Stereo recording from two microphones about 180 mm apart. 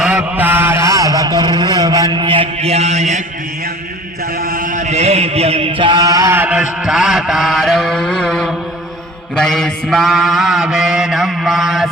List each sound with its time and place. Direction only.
0.0 s a sound: 10° right (ahead or behind); by 3.2 s 40° right (ahead or behind)
4.4 s chant: 50° right (ahead or behind); by 8.5 s centre (ahead or behind)
9.3 s mantra: centre (ahead or behind)